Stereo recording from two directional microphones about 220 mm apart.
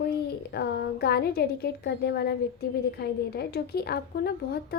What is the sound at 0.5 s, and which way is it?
Speech, 45° left (ahead or behind).